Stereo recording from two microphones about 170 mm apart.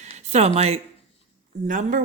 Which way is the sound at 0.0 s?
40° right (ahead or behind).